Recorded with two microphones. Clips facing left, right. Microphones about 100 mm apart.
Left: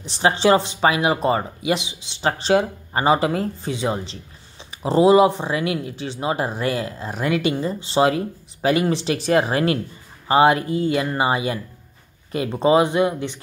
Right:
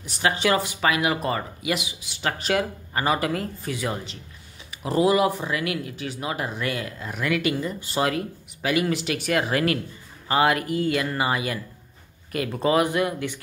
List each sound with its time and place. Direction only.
0.0 s speech: 30° left (ahead or behind)